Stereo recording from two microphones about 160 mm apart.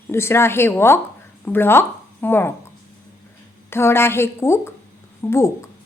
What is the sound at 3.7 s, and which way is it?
A woman's voice, 15° left (ahead or behind).